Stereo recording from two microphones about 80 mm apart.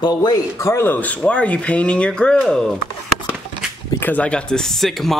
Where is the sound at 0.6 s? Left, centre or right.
Left; by 2.5 s centre.